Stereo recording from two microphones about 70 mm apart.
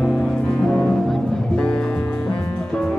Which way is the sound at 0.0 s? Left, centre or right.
Centre.